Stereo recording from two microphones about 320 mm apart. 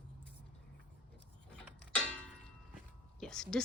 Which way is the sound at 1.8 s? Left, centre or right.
Centre.